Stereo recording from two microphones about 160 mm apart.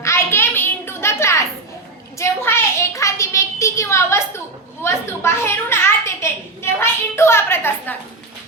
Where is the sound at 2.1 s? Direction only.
15° left (ahead or behind).